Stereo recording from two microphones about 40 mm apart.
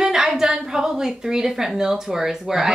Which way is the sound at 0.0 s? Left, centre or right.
Centre.